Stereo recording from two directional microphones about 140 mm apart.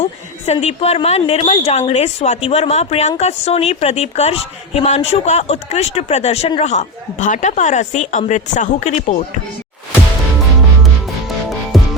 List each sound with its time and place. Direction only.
0.0 s a woman's voice: 50° left (ahead or behind)
11.7 s music: centre (ahead or behind)